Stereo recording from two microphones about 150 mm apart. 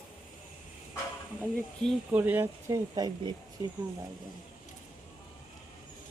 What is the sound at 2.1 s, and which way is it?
Speech, 10° right (ahead or behind).